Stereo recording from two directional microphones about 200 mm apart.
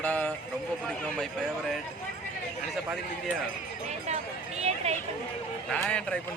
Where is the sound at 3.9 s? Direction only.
35° right (ahead or behind).